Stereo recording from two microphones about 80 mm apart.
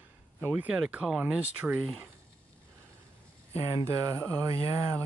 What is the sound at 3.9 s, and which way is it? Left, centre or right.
Speech, right.